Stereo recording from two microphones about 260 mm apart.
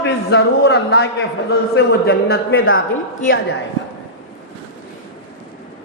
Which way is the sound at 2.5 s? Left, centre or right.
Left.